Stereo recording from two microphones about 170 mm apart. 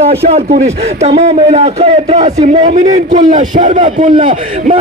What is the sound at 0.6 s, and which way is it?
A man's voice, 40° right (ahead or behind).